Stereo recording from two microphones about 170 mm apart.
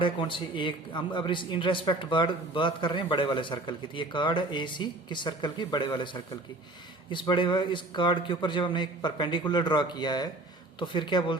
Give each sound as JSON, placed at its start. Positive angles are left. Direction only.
{"t": 0.0, "sound": "a man's voice", "side_deg": 30}